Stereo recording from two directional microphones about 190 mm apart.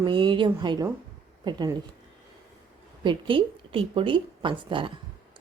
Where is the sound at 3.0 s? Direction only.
30° right (ahead or behind).